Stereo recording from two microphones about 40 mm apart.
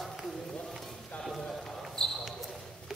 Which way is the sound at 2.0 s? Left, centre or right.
Centre.